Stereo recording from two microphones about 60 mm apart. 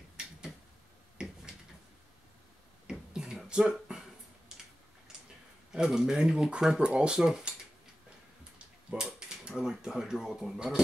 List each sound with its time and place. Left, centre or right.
1.2 s finger snapping: centre
2.9 s beatboxing: centre
5.7 s speech: centre
8.9 s speech: centre